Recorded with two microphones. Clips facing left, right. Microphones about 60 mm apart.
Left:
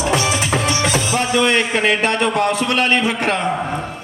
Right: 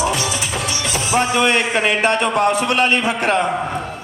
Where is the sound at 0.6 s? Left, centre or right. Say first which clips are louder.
Left 5 dB; left.